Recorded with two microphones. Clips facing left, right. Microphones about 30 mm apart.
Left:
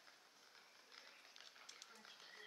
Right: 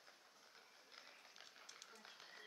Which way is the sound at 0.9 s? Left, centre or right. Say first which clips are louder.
Right 1 dB; centre.